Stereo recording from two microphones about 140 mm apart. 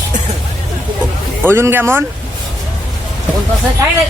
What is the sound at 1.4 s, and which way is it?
Speech, 15° right (ahead or behind).